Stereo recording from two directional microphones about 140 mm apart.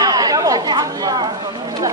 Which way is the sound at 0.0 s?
25° right (ahead or behind).